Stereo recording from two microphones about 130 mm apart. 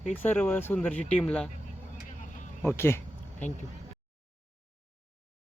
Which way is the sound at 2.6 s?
15° left (ahead or behind).